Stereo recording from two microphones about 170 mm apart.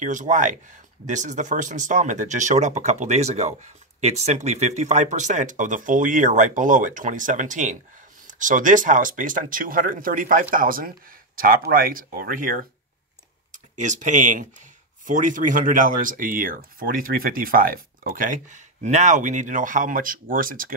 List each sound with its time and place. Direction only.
0.0 s speech: 50° right (ahead or behind)
13.5 s speech: 45° right (ahead or behind)